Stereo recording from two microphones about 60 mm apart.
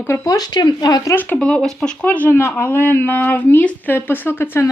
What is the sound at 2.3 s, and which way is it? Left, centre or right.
Speech, left.